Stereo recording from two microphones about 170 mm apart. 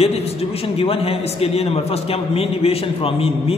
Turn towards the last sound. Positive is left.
turn(degrees=35)  # may be behind; listen again after turning